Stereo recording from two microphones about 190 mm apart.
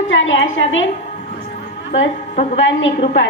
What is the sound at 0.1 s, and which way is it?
Speech, 85° left.